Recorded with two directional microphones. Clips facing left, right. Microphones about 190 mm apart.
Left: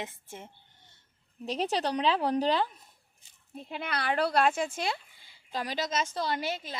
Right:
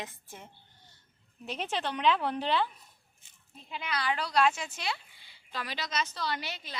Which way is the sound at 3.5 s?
55° left (ahead or behind).